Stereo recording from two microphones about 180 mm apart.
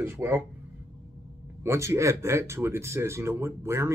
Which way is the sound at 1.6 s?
15° right (ahead or behind).